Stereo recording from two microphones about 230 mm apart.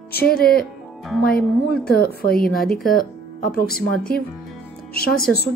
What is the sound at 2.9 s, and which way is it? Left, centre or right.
Speech, left.